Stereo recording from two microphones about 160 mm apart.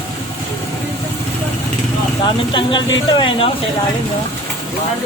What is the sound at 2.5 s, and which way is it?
Speech, 30° left (ahead or behind).